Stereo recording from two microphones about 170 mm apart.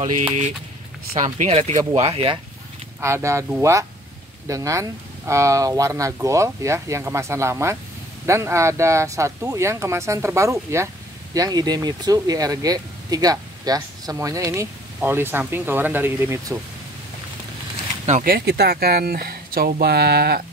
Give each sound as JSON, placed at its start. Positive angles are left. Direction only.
{"t": 1.2, "sound": "speech", "side_deg": -45}
{"t": 3.0, "sound": "speech", "side_deg": -15}
{"t": 18.0, "sound": "speech", "side_deg": -50}